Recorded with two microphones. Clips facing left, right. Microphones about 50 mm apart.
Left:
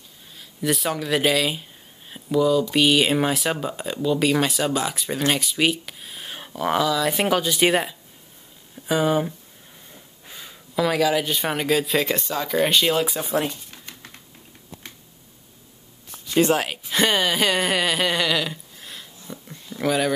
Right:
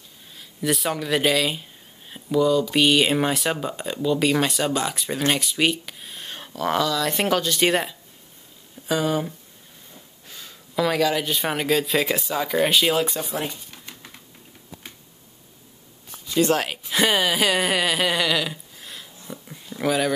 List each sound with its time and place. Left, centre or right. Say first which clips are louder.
0.4 s speech: even; centre
10.2 s a sound: left 2 dB; centre
10.7 s speech: left 1 dB; centre
16.4 s speech: left 1 dB; centre